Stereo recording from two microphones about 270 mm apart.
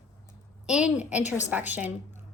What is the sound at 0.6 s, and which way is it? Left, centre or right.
A woman's voice, centre.